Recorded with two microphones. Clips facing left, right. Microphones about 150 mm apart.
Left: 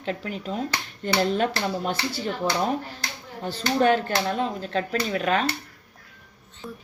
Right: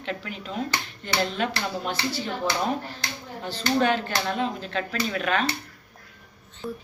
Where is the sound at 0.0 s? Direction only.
40° left (ahead or behind).